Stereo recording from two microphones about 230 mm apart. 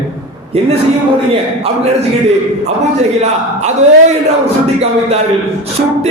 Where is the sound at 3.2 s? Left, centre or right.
Right.